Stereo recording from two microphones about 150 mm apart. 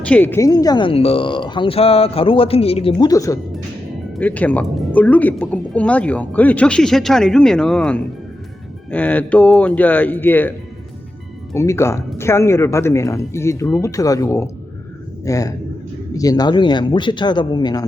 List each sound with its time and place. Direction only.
0.0 s speech: 10° left (ahead or behind); by 2.9 s 40° left (ahead or behind)
3.0 s speech: 25° left (ahead or behind)
4.2 s speech: 10° left (ahead or behind)
11.5 s speech: 20° left (ahead or behind)